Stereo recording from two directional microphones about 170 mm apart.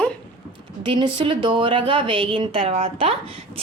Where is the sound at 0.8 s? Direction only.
30° right (ahead or behind).